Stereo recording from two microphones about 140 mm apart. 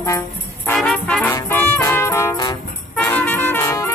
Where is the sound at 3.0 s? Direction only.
10° left (ahead or behind).